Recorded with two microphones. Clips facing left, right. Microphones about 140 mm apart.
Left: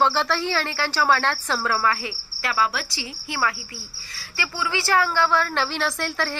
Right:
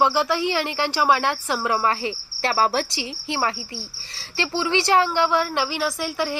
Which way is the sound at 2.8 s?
20° right (ahead or behind).